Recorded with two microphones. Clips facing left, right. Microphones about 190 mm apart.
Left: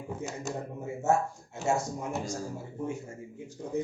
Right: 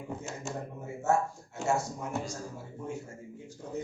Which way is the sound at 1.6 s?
20° left (ahead or behind).